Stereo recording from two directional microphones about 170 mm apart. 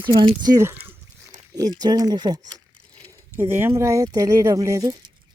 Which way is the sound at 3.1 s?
15° right (ahead or behind).